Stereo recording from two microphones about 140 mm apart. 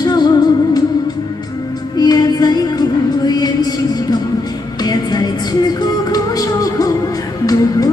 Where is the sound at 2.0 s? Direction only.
30° left (ahead or behind).